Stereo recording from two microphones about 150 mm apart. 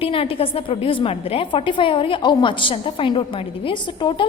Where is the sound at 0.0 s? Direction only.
35° left (ahead or behind).